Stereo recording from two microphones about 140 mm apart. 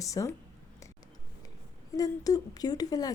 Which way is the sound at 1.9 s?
25° left (ahead or behind).